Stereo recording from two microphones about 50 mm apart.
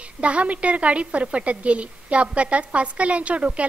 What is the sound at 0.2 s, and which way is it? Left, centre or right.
A woman's voice, right.